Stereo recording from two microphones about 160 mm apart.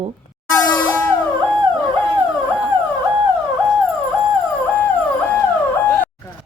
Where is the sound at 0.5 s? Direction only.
15° left (ahead or behind).